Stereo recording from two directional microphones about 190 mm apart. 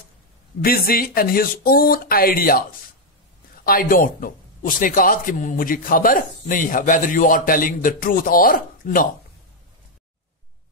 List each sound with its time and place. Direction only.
0.6 s a man's voice: 50° left (ahead or behind)
3.6 s a man's voice: 50° left (ahead or behind)